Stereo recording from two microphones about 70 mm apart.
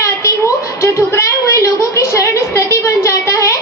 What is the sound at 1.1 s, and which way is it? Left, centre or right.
A woman's voice, left.